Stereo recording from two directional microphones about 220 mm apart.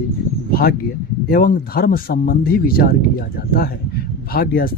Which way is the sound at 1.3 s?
40° left (ahead or behind).